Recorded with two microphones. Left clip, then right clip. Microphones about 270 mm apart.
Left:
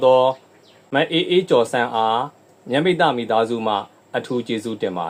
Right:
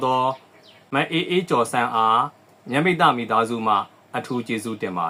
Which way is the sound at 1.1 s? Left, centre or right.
Right.